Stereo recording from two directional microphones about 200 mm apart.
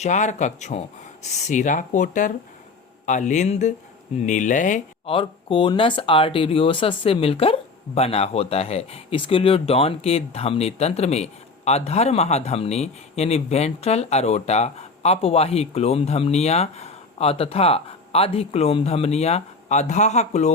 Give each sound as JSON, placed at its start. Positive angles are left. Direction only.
{"t": 0.0, "sound": "speech", "side_deg": 35}
{"t": 5.1, "sound": "speech", "side_deg": 25}